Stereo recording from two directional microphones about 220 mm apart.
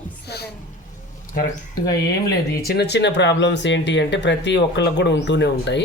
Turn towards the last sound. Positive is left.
turn(degrees=50)  # may be behind; listen again after turning